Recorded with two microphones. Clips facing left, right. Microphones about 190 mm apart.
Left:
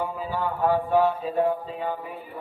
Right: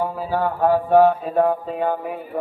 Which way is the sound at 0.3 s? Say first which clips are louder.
Right 5 dB; 50° right (ahead or behind).